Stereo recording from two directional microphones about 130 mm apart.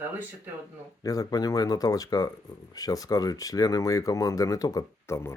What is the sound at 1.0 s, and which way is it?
Speech, 25° left (ahead or behind).